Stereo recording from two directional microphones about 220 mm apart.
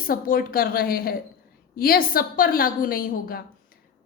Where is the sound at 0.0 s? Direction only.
40° left (ahead or behind).